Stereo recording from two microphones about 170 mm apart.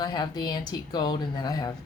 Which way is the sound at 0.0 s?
25° left (ahead or behind).